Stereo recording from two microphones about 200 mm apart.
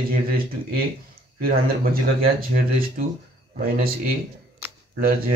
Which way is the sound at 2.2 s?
45° right (ahead or behind).